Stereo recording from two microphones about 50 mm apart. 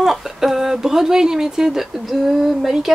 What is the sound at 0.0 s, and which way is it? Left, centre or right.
Speech, centre.